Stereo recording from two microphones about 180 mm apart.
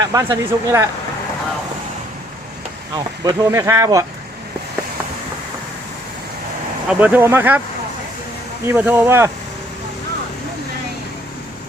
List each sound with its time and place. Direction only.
0.1 s speech: 20° right (ahead or behind)
3.2 s speech: 20° right (ahead or behind)
6.8 s speech: 10° right (ahead or behind)
8.6 s speech: 10° right (ahead or behind)